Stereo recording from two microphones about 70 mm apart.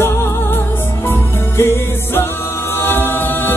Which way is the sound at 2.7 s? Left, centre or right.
Left.